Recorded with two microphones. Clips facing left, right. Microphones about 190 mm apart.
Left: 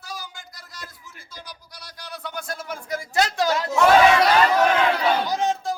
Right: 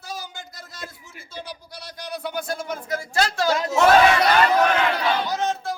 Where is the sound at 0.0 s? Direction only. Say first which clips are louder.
Right 3 dB; 25° right (ahead or behind).